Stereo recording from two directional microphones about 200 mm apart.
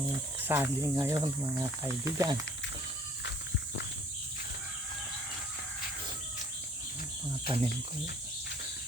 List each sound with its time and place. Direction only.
0.3 s speech: 10° right (ahead or behind)
7.4 s speech: 25° right (ahead or behind)